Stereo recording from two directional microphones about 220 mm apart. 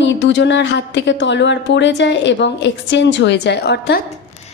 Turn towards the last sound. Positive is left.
turn(degrees=50)  # may be behind; listen again after turning